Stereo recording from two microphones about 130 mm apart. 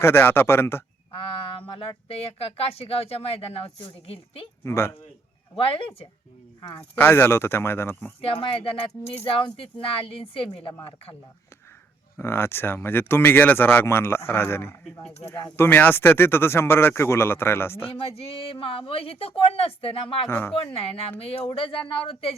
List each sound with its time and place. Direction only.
0.0 s speech: 15° left (ahead or behind)
1.1 s a sound: 40° left (ahead or behind)
2.0 s speech: 50° left (ahead or behind)
4.6 s speech: 20° left (ahead or behind)
5.5 s speech: 45° left (ahead or behind)
6.6 s speech: 30° left (ahead or behind)
6.9 s speech: 15° left (ahead or behind)
8.2 s speech: 45° left (ahead or behind)
12.1 s speech: 20° left (ahead or behind)
17.9 s speech: 50° left (ahead or behind)